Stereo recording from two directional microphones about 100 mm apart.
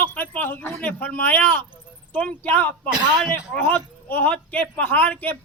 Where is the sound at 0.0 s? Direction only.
20° left (ahead or behind).